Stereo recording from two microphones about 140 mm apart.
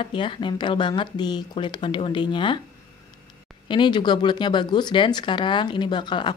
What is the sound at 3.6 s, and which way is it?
Speech, 35° left (ahead or behind).